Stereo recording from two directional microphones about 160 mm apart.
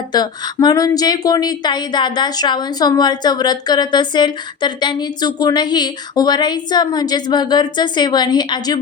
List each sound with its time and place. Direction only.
0.1 s speech: 25° left (ahead or behind)